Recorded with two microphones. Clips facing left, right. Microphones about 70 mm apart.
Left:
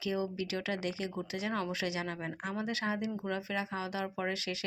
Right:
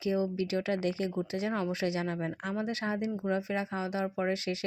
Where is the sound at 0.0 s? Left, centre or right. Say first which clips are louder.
Right 4 dB; right.